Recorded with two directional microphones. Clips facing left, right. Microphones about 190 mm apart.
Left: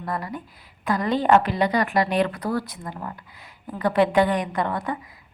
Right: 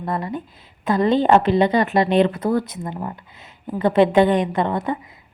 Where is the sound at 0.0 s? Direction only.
25° right (ahead or behind).